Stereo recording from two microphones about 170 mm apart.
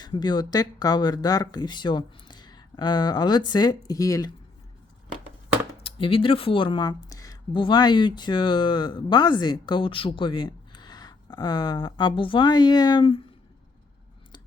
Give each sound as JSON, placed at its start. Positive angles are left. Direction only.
{"t": 0.0, "sound": "speech", "side_deg": 25}
{"t": 5.8, "sound": "speech", "side_deg": 30}